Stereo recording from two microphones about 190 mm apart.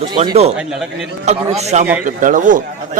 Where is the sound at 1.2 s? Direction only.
35° right (ahead or behind).